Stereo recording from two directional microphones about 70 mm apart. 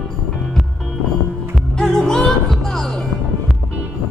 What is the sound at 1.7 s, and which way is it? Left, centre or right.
Music, centre.